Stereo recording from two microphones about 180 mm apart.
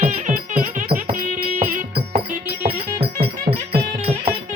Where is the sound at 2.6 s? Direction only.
60° right (ahead or behind).